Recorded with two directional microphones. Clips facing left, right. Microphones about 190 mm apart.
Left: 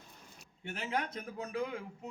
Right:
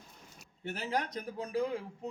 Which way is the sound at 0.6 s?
40° right (ahead or behind).